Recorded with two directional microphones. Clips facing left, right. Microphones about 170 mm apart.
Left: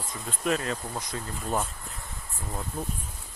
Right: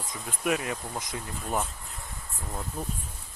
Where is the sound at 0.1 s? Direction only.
10° right (ahead or behind).